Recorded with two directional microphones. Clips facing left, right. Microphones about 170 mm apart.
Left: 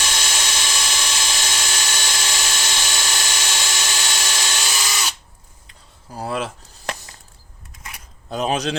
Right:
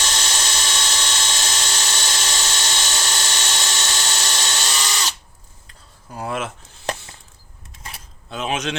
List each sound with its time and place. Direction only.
0.0 s dental drill: 10° left (ahead or behind)
6.1 s chopping: 35° left (ahead or behind)
7.8 s a sound: 30° right (ahead or behind)
8.3 s a man's voice: 40° left (ahead or behind)